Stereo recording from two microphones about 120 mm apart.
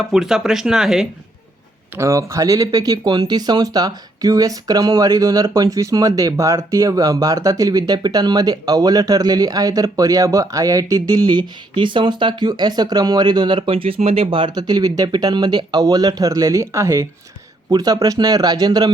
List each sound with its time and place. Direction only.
0.0 s speech: 5° right (ahead or behind)
2.0 s speech: 25° right (ahead or behind)